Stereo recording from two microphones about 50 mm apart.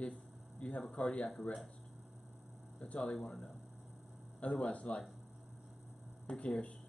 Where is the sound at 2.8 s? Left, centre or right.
Left.